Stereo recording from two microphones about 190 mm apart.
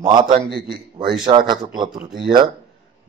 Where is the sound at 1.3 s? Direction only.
35° right (ahead or behind).